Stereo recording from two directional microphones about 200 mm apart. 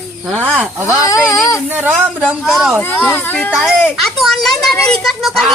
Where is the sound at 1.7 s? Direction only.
10° right (ahead or behind).